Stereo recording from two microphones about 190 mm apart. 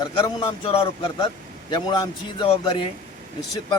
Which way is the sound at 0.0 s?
25° left (ahead or behind).